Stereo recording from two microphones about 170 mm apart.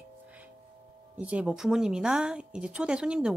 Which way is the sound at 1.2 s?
5° right (ahead or behind).